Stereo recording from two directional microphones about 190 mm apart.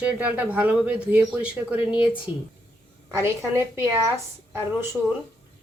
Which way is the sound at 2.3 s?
25° left (ahead or behind).